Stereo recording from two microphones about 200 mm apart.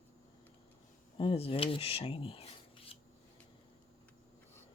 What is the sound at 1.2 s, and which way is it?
Speech, 25° left (ahead or behind).